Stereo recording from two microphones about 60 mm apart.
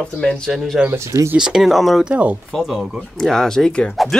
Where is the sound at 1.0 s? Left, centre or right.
Right.